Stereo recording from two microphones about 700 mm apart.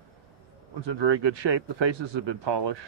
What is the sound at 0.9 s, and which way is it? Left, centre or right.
Speech, right.